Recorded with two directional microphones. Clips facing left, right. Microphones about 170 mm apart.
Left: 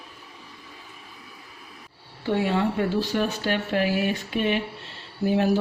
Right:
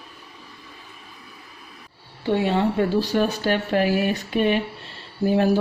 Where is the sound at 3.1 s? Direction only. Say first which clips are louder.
Right 4 dB; 40° right (ahead or behind).